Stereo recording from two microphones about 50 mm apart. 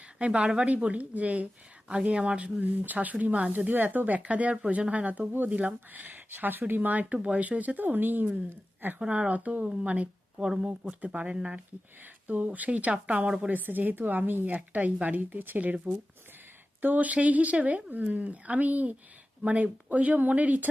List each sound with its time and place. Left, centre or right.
0.2 s speech: right
9.0 s speech: right
9.6 s speech: centre
9.9 s speech: right
13.5 s speech: right
16.8 s speech: right